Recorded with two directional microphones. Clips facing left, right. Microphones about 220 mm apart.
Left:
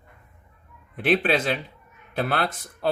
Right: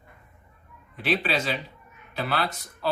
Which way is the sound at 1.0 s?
50° left (ahead or behind).